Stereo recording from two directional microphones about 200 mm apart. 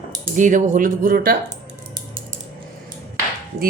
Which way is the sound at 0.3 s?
40° right (ahead or behind).